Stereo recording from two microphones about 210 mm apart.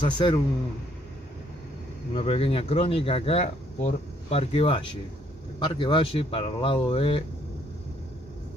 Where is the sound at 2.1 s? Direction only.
25° left (ahead or behind).